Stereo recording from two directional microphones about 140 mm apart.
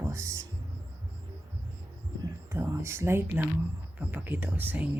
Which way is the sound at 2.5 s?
20° right (ahead or behind).